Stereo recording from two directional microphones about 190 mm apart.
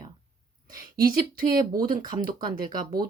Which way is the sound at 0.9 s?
50° right (ahead or behind).